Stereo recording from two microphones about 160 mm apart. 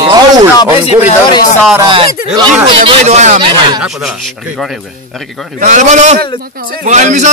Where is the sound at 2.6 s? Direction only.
35° right (ahead or behind).